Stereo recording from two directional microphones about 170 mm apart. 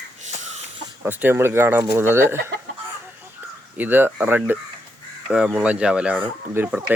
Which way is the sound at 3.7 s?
10° right (ahead or behind).